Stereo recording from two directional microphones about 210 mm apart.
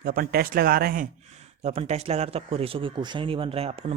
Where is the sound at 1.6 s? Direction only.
30° right (ahead or behind).